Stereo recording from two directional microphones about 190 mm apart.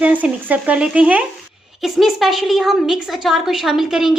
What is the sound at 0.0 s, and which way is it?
A woman's voice, 10° right (ahead or behind).